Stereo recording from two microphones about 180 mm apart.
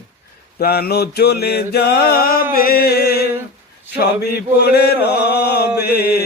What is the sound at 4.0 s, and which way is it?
Mantra, 60° left (ahead or behind).